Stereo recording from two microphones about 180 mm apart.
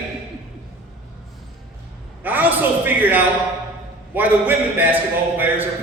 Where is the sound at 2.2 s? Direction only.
10° right (ahead or behind).